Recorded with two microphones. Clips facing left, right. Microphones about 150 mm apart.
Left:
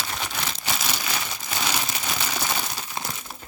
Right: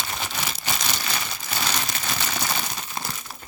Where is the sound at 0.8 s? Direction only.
5° left (ahead or behind).